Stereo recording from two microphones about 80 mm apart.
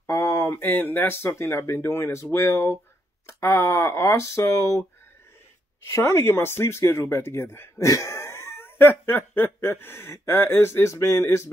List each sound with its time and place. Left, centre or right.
0.0 s a sound: left
0.5 s speech: left
5.9 s speech: left
7.8 s speech: left